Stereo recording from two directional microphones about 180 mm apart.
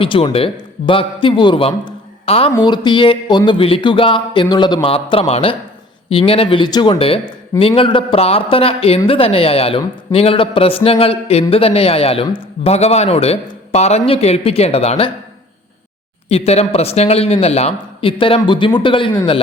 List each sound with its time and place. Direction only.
0.0 s a man's voice: 30° left (ahead or behind)
2.5 s speech: 20° left (ahead or behind)
16.3 s speech: 35° left (ahead or behind)